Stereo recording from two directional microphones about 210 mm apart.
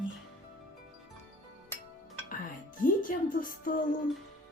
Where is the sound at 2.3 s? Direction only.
40° left (ahead or behind).